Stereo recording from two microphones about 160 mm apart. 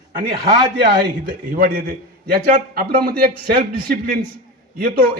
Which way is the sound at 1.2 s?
60° right (ahead or behind).